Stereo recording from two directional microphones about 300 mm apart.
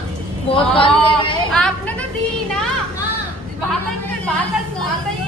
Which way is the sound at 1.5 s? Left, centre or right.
Centre.